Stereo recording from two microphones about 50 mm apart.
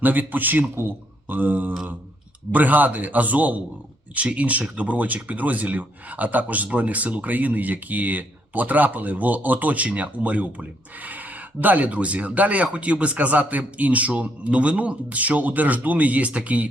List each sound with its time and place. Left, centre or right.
0.0 s speech: right